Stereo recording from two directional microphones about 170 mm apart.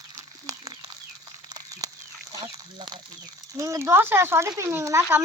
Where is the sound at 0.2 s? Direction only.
20° right (ahead or behind).